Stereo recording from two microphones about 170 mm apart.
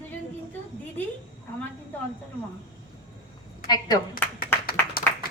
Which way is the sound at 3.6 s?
25° left (ahead or behind).